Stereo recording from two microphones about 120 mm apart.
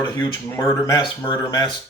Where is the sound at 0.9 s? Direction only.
35° left (ahead or behind).